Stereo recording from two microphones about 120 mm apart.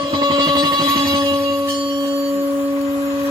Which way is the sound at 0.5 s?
30° right (ahead or behind).